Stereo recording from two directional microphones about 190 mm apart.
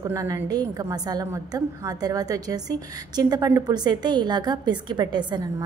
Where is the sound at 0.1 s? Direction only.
15° right (ahead or behind).